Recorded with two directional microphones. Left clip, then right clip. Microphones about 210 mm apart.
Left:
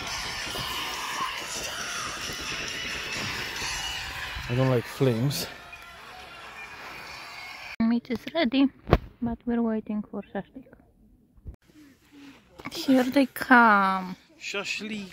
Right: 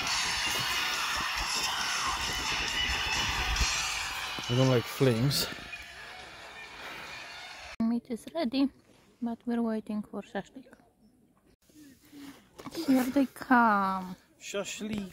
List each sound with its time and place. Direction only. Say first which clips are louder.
0.0 s music: right 3 dB; 35° right (ahead or behind); by 5.5 s 5° left (ahead or behind)
5.9 s vehicle: left 2 dB; centre (ahead or behind)
7.1 s a sound: left 3 dB; 5° left (ahead or behind)
9.2 s speech: left 4 dB; centre (ahead or behind)
12.6 s speech: left 5 dB; centre (ahead or behind)
14.4 s a man's voice: left 5 dB; 40° right (ahead or behind)